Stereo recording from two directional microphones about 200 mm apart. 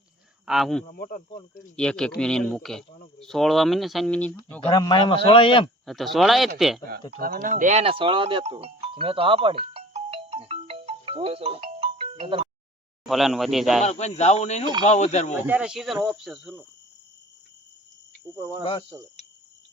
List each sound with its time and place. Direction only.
0.4 s speech: centre (ahead or behind)
0.9 s speech: 45° left (ahead or behind)
1.7 s speech: 5° left (ahead or behind); by 5.6 s 25° left (ahead or behind)
5.8 s speech: centre (ahead or behind)
7.2 s speech: 45° right (ahead or behind); by 12.5 s 30° right (ahead or behind)
13.1 s speech: centre (ahead or behind)
13.8 s speech: 35° left (ahead or behind)
15.4 s speech: 10° right (ahead or behind)
18.3 s cricket: 15° right (ahead or behind)
18.6 s speech: 25° left (ahead or behind)